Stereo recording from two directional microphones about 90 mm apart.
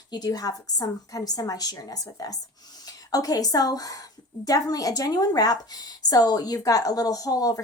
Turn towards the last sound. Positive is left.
turn(degrees=45)  # may be behind; listen again after turning